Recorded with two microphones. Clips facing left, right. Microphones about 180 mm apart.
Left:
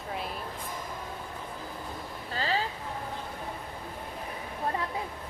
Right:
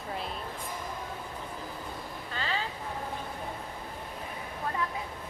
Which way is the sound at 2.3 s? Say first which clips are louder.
Left 4 dB; 35° left (ahead or behind).